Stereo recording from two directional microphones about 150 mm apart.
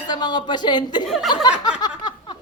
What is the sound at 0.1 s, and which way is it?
Speech, 30° left (ahead or behind).